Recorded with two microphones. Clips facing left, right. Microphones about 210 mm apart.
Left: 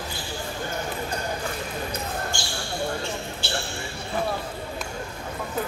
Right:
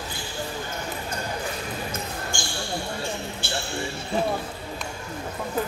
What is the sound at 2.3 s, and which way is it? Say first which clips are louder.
Basketball bounce: right 1 dB; 50° right (ahead or behind).